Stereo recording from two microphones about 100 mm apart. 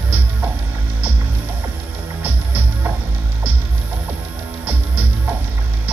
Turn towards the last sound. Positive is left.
turn(degrees=-20)  # may be behind; listen again after turning